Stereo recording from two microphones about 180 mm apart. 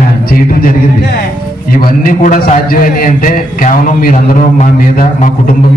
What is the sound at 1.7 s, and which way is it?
A man's voice, 50° left (ahead or behind).